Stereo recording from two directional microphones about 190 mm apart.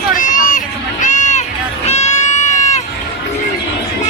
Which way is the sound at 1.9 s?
35° left (ahead or behind).